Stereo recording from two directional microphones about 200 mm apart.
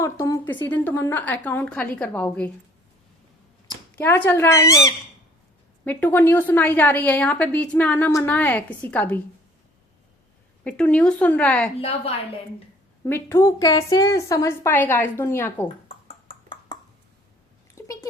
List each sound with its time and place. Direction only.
0.0 s a woman's voice: 15° left (ahead or behind)
3.9 s a woman's voice: 10° left (ahead or behind)
10.6 s a woman's voice: 5° left (ahead or behind)
13.1 s a woman's voice: 10° left (ahead or behind)
16.0 s a sound: 25° left (ahead or behind)
17.8 s a sound: 15° left (ahead or behind)